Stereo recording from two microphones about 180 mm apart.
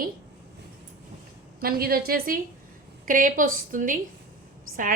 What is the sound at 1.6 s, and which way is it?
A woman's voice, 55° right (ahead or behind).